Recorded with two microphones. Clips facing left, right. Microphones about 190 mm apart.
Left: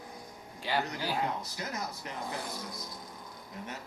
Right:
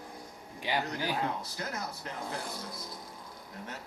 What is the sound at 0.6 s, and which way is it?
Speech, 15° right (ahead or behind).